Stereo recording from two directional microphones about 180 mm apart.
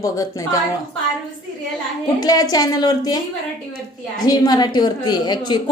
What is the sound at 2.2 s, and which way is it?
Speech, 20° left (ahead or behind).